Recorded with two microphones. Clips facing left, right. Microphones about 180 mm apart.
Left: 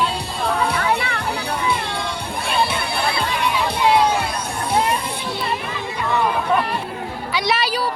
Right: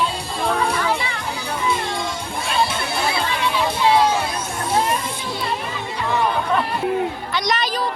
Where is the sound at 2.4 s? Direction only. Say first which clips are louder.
Even; 60° left (ahead or behind).